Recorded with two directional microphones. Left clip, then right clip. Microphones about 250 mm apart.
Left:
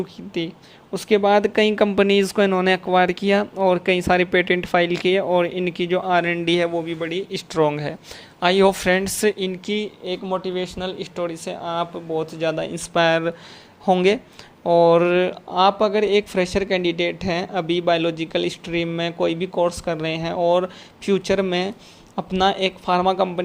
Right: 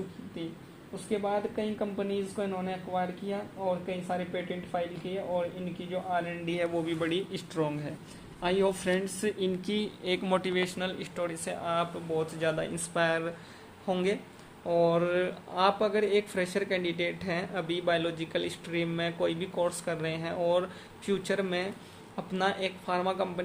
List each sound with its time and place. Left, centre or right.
0.9 s speech: left
6.7 s speech: centre